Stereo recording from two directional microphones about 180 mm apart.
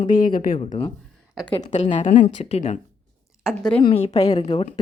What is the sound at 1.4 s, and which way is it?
Speech, 25° left (ahead or behind).